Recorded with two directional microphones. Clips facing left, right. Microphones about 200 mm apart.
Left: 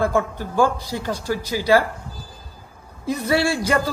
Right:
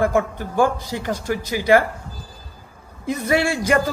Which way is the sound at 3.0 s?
15° right (ahead or behind).